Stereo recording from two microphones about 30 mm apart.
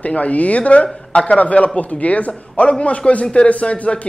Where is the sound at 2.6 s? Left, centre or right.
Left.